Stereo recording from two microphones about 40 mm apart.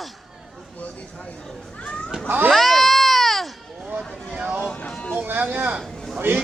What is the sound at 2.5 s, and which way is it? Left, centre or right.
Baby cry, centre.